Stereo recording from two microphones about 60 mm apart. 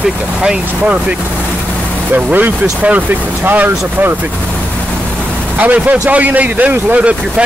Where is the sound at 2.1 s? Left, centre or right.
Right.